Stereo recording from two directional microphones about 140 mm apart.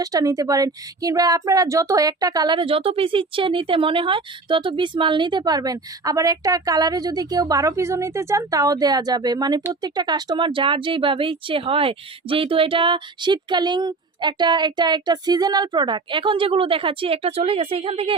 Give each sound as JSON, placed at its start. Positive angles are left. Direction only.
{"t": 0.0, "sound": "a woman's voice", "side_deg": -25}